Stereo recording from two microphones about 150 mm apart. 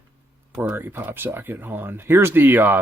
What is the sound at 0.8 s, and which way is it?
Speech, 10° right (ahead or behind).